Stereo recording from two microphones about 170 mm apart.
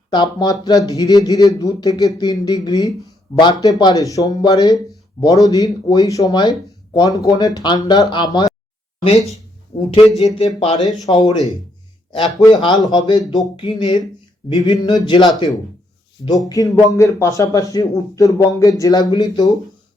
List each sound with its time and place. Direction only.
0.1 s speech: 25° left (ahead or behind)
10.3 s speech: 35° left (ahead or behind)
11.0 s speech: 30° left (ahead or behind)
16.5 s speech: 20° left (ahead or behind)